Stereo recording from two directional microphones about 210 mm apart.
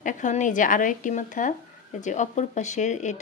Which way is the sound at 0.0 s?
35° left (ahead or behind).